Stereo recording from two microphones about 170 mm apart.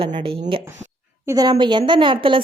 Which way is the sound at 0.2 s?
30° right (ahead or behind).